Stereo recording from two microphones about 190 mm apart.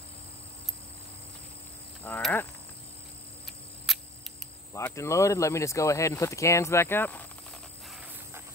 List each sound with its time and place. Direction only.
2.0 s speech: 10° left (ahead or behind)
3.9 s camera: centre (ahead or behind)
4.7 s speech: 15° left (ahead or behind)